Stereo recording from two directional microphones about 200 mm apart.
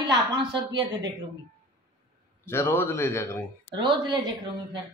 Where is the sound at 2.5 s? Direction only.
10° left (ahead or behind).